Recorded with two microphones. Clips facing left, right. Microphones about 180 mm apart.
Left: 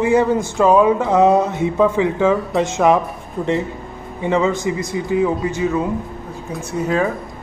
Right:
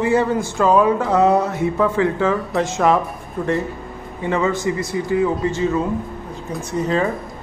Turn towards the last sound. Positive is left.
turn(degrees=5)  # may be behind; listen again after turning